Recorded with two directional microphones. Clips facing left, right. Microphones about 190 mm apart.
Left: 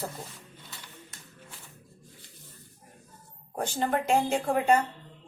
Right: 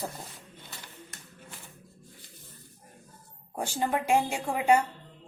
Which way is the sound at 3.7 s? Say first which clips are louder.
Even; 10° right (ahead or behind).